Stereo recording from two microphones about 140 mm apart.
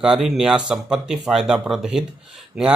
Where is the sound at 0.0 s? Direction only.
5° right (ahead or behind).